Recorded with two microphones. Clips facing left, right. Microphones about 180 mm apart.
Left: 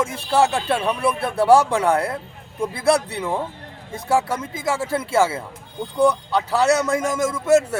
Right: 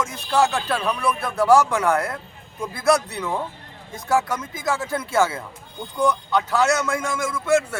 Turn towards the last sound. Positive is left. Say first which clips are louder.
# left 4 dB
turn(degrees=40)  # may be behind; listen again after turning